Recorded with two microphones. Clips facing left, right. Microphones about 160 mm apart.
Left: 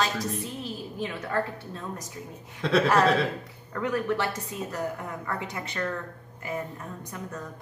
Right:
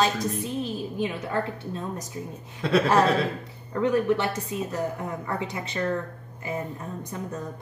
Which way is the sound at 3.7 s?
20° right (ahead or behind).